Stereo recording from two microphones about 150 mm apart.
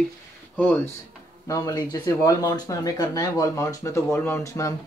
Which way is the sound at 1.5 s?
25° left (ahead or behind).